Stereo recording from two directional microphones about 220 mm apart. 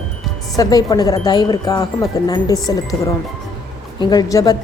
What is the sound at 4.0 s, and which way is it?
Speech, 20° left (ahead or behind).